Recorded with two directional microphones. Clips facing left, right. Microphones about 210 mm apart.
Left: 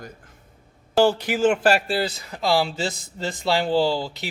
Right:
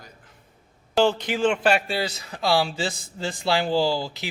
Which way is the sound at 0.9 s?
10° left (ahead or behind).